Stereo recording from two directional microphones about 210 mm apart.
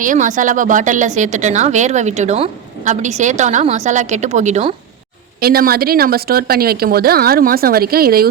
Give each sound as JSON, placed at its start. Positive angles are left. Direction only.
{"t": 0.0, "sound": "a woman's voice", "side_deg": -40}
{"t": 5.4, "sound": "speech", "side_deg": -45}